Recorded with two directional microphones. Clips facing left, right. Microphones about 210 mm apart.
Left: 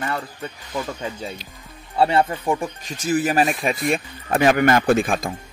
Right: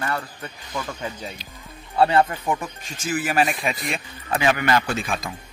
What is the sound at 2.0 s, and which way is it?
Speech, 25° left (ahead or behind).